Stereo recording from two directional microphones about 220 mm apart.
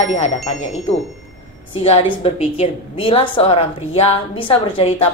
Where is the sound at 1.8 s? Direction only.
25° left (ahead or behind).